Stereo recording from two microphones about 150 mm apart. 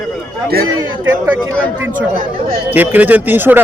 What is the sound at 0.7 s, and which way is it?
Speech, 20° right (ahead or behind).